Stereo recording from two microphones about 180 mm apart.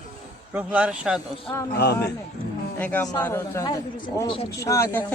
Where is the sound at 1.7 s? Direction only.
60° left (ahead or behind).